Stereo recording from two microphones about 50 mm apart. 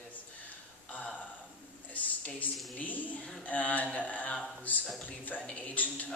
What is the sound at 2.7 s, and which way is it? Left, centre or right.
A woman's voice, left.